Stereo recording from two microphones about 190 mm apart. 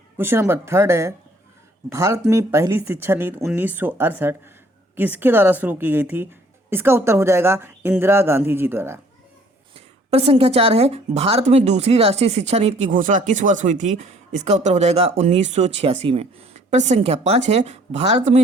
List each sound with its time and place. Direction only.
0.2 s a woman's voice: 10° right (ahead or behind)
9.7 s speech: 30° right (ahead or behind)